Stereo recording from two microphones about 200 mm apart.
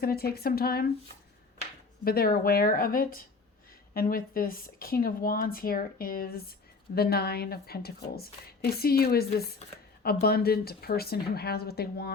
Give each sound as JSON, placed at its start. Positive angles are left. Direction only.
{"t": 0.0, "sound": "a woman's voice", "side_deg": 50}
{"t": 2.0, "sound": "a woman's voice", "side_deg": 50}